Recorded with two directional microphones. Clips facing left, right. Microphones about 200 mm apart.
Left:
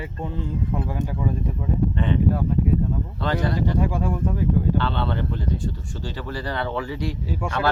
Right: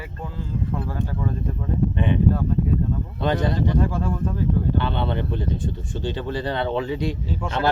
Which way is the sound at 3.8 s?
15° left (ahead or behind).